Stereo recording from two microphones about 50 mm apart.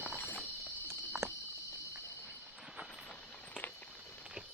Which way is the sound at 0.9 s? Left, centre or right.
Right.